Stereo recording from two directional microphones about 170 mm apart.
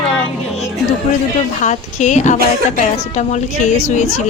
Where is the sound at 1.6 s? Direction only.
45° left (ahead or behind).